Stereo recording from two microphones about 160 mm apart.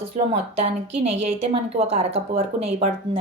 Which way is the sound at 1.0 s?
40° right (ahead or behind).